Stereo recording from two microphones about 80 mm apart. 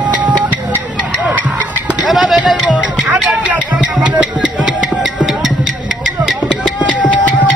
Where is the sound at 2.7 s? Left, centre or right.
Centre.